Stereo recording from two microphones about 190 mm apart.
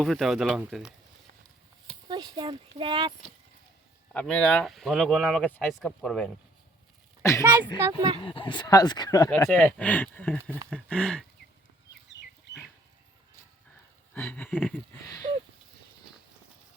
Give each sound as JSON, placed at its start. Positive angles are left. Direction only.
{"t": 0.0, "sound": "speech", "side_deg": 0}
{"t": 2.0, "sound": "speech", "side_deg": -20}
{"t": 4.1, "sound": "speech", "side_deg": 10}
{"t": 7.2, "sound": "speech", "side_deg": 15}
{"t": 7.4, "sound": "speech", "side_deg": -10}
{"t": 8.2, "sound": "speech", "side_deg": 25}
{"t": 9.3, "sound": "speech", "side_deg": 5}
{"t": 14.1, "sound": "speech", "side_deg": 10}